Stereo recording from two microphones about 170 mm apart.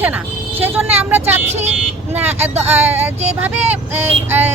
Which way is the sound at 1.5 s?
40° right (ahead or behind).